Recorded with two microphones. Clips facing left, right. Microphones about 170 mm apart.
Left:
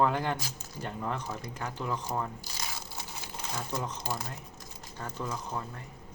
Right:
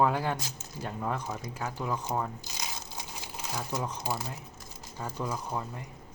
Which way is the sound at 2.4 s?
15° right (ahead or behind).